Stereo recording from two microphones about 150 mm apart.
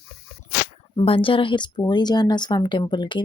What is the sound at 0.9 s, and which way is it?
A woman's voice, 35° left (ahead or behind).